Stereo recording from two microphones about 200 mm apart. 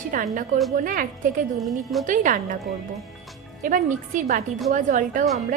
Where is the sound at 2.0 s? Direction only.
40° right (ahead or behind).